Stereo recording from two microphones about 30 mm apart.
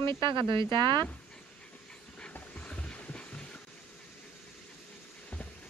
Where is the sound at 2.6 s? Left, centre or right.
Left.